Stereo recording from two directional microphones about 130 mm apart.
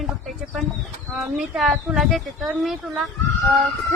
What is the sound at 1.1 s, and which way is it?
A woman's voice, centre (ahead or behind).